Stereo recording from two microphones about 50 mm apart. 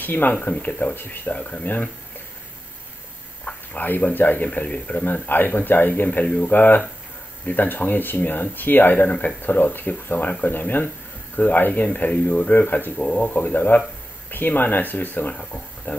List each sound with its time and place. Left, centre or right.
0.0 s speech: left
3.7 s speech: left
15.3 s speech: left